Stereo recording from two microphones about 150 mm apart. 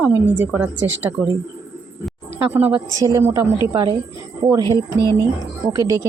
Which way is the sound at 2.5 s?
15° right (ahead or behind).